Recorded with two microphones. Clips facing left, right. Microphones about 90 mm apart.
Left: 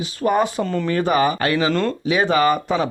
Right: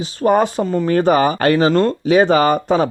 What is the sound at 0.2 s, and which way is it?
Speech, 35° right (ahead or behind).